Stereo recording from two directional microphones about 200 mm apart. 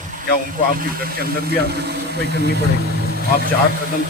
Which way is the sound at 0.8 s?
50° right (ahead or behind).